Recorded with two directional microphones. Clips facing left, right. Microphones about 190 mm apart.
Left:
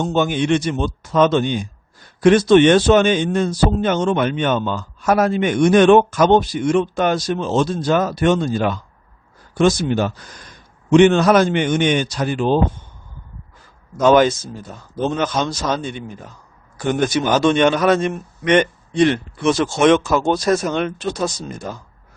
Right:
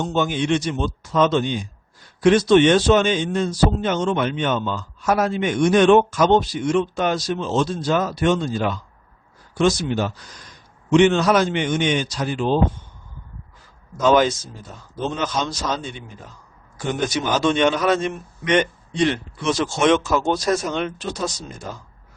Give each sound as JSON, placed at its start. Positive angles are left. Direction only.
{"t": 0.0, "sound": "speech", "side_deg": 55}
{"t": 13.9, "sound": "speech", "side_deg": 55}